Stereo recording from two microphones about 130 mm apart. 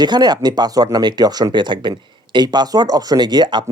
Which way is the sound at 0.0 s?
35° right (ahead or behind).